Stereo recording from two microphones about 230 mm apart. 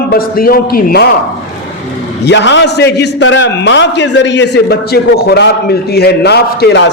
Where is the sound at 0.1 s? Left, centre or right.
Left.